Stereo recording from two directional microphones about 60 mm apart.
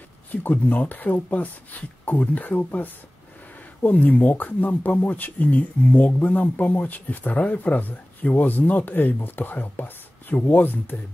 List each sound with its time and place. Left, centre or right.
0.3 s speech: left